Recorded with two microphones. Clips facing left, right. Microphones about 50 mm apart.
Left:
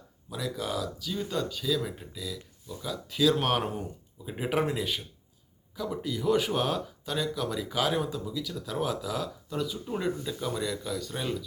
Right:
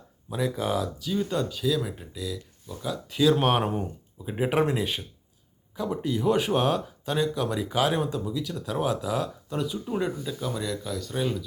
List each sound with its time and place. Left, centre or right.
0.3 s speech: right
1.1 s speech: centre
3.4 s speech: right; by 11.4 s centre